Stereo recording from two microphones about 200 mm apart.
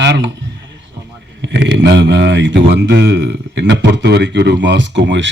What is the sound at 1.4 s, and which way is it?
Speech, 60° right (ahead or behind).